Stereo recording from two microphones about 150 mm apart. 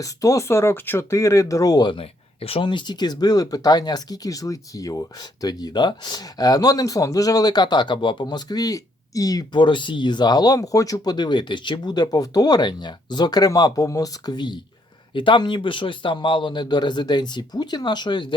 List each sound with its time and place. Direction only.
0.0 s a man's voice: 20° left (ahead or behind)